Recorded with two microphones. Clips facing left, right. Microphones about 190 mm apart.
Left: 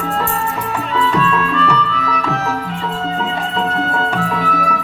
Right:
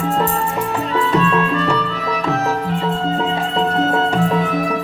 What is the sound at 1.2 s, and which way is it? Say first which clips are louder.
Music: even; 25° right (ahead or behind).